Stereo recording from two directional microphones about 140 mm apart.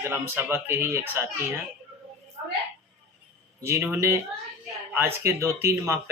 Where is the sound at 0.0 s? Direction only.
15° right (ahead or behind).